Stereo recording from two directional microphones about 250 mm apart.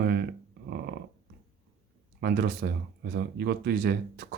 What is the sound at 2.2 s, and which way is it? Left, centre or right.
Speech, right.